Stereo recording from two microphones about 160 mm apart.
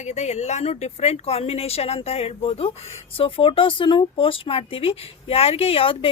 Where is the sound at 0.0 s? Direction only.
45° left (ahead or behind).